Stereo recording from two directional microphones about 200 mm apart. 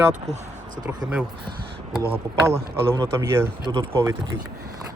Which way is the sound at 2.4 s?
15° right (ahead or behind).